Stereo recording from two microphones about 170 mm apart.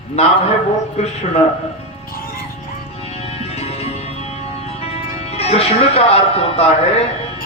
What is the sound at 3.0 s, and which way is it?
Music, 35° left (ahead or behind).